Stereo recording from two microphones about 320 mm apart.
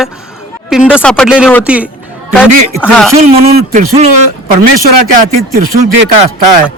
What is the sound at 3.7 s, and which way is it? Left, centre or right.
A man's voice, right.